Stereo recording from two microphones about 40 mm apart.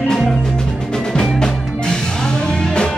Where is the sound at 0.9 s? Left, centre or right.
Centre.